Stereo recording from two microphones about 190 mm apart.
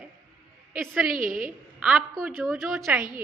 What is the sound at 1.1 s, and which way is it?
Speech, 45° right (ahead or behind).